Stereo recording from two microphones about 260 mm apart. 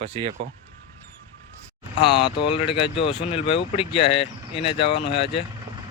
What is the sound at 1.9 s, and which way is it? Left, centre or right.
Speech, centre.